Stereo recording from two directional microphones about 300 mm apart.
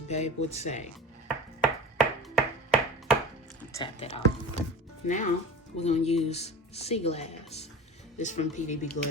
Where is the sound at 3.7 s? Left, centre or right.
Centre.